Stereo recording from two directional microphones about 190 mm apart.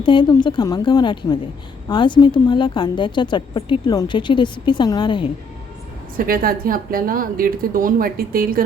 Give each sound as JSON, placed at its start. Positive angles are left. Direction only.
{"t": 0.0, "sound": "a woman's voice", "side_deg": 25}
{"t": 6.1, "sound": "a woman's voice", "side_deg": -50}